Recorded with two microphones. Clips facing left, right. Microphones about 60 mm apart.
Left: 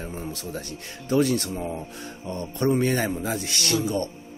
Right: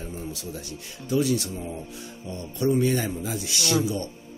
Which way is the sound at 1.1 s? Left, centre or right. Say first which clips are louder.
Left 2 dB; left.